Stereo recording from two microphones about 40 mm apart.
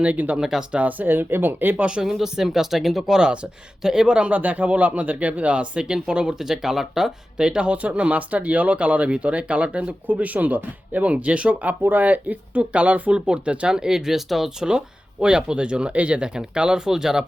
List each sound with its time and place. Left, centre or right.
0.0 s speech: right
2.0 s speech: centre
3.8 s speech: centre
4.2 s speech: right; by 7.1 s centre
7.3 s speech: right
7.8 s speech: right
10.1 s speech: right
13.7 s speech: centre
15.2 s speech: right